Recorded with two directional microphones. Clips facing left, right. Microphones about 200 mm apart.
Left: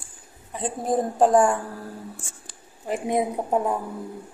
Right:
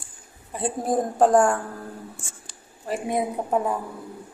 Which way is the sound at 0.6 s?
Centre (ahead or behind).